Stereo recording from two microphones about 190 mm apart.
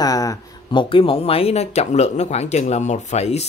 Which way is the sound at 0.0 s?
20° left (ahead or behind).